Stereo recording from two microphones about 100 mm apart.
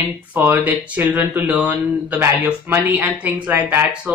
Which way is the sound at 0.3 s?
20° right (ahead or behind).